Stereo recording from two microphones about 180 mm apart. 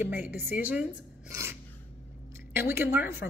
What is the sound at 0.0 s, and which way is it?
Speech, 10° right (ahead or behind).